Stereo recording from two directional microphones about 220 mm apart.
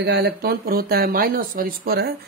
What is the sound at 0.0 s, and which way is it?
Speech, 50° right (ahead or behind).